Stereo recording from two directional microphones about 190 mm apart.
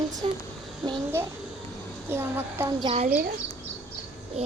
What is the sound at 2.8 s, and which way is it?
Speech, 35° right (ahead or behind).